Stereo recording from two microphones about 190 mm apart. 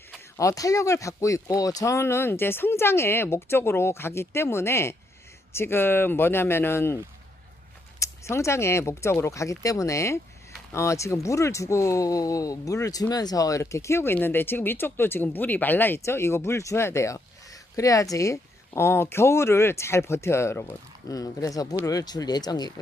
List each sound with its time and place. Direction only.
0.3 s speech: 15° left (ahead or behind)